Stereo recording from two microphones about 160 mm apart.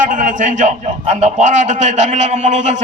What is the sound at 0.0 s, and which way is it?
A man's voice, 50° right (ahead or behind).